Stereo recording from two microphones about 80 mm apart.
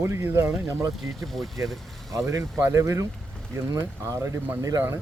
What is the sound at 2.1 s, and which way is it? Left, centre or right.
Speech, right.